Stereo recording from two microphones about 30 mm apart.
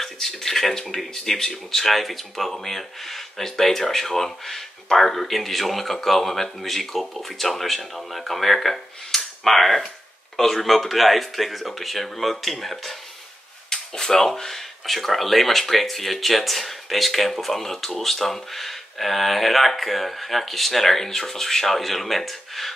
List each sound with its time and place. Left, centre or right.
0.0 s speech: centre
13.7 s speech: centre